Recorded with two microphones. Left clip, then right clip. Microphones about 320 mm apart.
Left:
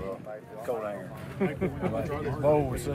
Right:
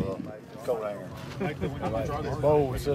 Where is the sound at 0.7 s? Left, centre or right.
Centre.